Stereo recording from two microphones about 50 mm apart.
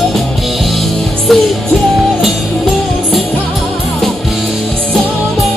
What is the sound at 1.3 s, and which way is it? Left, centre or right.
Music, centre.